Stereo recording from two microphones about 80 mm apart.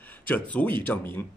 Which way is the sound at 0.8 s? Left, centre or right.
Left.